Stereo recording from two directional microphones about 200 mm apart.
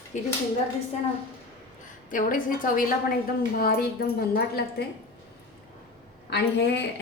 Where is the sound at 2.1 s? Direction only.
40° left (ahead or behind).